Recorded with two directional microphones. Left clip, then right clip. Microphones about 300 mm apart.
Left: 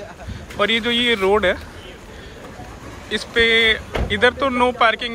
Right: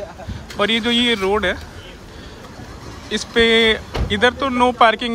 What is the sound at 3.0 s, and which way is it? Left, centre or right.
Speech, centre.